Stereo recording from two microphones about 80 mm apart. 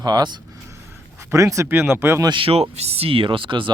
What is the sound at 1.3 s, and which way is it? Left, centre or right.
Speech, right.